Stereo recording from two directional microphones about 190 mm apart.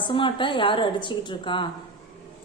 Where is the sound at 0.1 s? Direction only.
25° left (ahead or behind).